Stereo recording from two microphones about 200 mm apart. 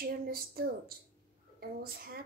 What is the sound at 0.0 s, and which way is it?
Speech, 50° right (ahead or behind).